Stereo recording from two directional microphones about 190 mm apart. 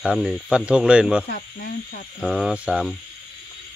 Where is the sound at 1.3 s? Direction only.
55° left (ahead or behind).